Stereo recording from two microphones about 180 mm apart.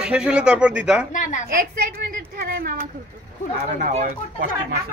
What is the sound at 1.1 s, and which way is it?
Speech, 45° left (ahead or behind).